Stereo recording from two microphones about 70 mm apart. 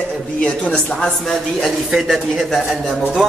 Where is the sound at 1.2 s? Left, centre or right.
Centre.